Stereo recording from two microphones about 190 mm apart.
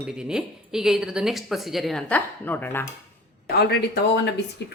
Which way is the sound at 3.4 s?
55° left (ahead or behind).